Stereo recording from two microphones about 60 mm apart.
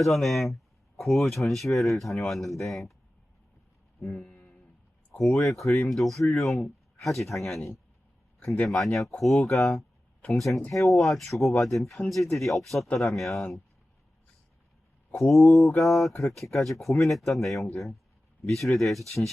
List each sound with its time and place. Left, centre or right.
0.0 s speech: centre
4.0 s speech: centre
4.3 s a sound: centre
5.1 s speech: centre
15.1 s speech: centre